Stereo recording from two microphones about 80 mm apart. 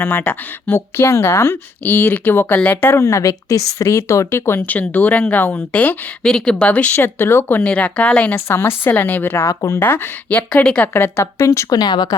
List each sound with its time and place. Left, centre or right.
0.0 s speech: left
3.0 s a woman's voice: left
6.2 s speech: centre
6.9 s speech: left
7.6 s speech: centre
8.4 s speech: left
9.5 s a woman's voice: left
9.8 s speech: left
10.9 s a woman's voice: left
11.8 s speech: left